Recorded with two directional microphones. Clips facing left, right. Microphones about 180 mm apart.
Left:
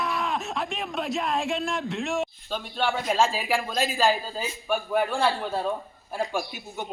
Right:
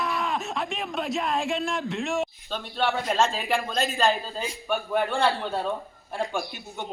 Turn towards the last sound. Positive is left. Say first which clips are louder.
# left 1 dB
turn(degrees=5)  # may be behind; listen again after turning